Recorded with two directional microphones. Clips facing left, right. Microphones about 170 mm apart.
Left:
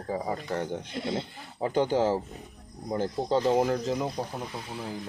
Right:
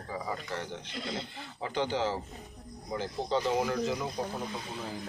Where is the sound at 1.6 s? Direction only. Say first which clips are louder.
Left 6 dB; 45° left (ahead or behind).